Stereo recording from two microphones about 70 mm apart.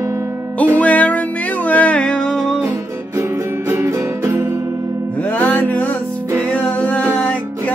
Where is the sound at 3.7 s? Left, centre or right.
Right.